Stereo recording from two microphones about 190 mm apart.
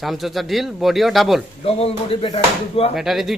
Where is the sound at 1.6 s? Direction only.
30° left (ahead or behind).